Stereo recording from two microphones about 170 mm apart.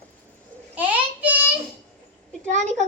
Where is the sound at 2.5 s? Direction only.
45° right (ahead or behind).